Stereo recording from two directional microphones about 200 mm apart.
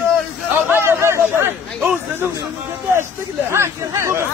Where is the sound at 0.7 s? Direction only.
10° right (ahead or behind).